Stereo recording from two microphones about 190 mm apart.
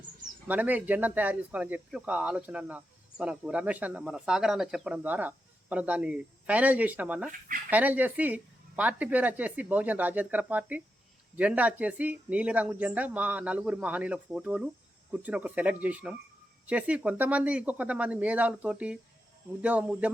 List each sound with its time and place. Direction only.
0.4 s speech: 10° right (ahead or behind)
7.3 s speech: 45° right (ahead or behind)
7.7 s speech: 10° right (ahead or behind)